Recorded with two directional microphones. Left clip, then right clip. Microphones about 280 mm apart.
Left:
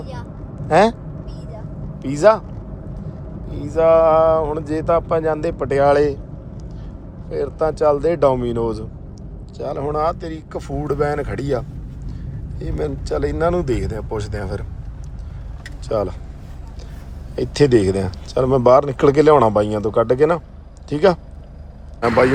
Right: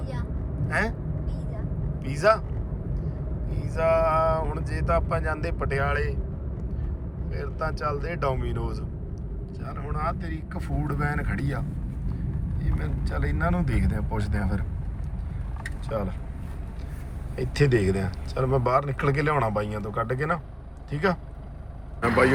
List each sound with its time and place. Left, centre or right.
2.0 s speech: centre
3.5 s speech: centre
7.3 s speech: centre
15.9 s speech: centre
17.3 s speech: centre